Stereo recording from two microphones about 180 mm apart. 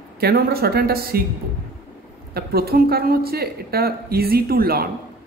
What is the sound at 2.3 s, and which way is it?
A woman's voice, 60° right (ahead or behind).